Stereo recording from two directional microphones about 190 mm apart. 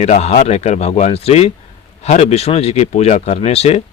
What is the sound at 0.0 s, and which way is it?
Speech, 35° left (ahead or behind).